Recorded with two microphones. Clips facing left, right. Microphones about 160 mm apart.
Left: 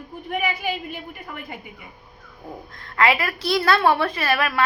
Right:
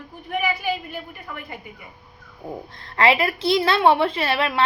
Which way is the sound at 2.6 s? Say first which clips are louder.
Right 1 dB; 30° right (ahead or behind).